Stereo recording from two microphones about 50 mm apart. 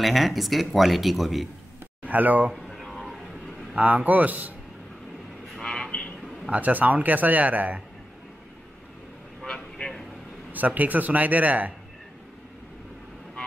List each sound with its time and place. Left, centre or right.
0.0 s speech: centre
2.0 s speech: right
2.5 s a sound: centre
3.7 s speech: right
5.6 s vehicle: centre
5.9 s a sound: left
6.5 s speech: right
9.5 s vehicle: centre
10.5 s speech: right